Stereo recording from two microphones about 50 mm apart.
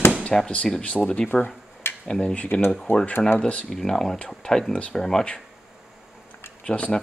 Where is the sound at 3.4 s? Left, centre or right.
Left.